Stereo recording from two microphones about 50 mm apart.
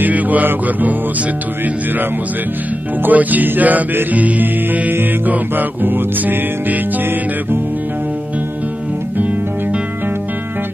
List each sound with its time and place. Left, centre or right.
0.0 s mantra: right
0.5 s music: right
3.1 s music: right